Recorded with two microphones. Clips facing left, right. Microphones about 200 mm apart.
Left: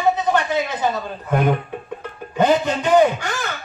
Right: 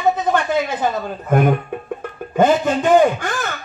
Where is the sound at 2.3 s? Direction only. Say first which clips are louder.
Right 2 dB; 50° right (ahead or behind).